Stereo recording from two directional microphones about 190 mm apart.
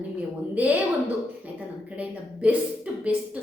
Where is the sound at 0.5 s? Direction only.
10° right (ahead or behind).